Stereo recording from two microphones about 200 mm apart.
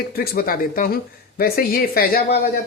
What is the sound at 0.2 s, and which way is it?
Speech, 50° left (ahead or behind).